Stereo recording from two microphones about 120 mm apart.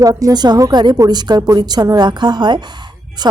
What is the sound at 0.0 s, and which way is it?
A woman's voice, 30° right (ahead or behind).